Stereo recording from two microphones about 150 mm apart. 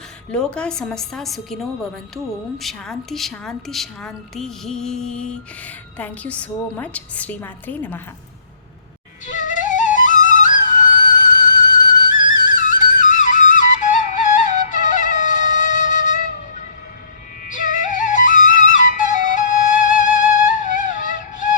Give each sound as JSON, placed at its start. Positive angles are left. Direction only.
{"t": 0.3, "sound": "a woman's voice", "side_deg": 5}
{"t": 9.2, "sound": "flute", "side_deg": 60}
{"t": 17.4, "sound": "music", "side_deg": 60}